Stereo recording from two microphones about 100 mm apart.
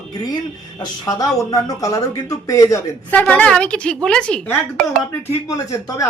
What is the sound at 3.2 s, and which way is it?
A woman's voice, 10° left (ahead or behind).